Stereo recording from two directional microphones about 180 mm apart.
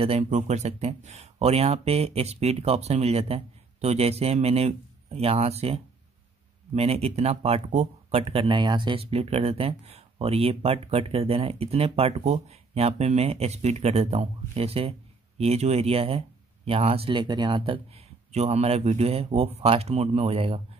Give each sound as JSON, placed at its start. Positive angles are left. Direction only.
{"t": 0.0, "sound": "speech", "side_deg": -35}